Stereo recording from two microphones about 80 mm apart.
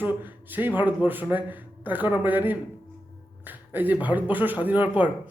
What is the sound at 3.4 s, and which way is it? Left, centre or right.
Music, right.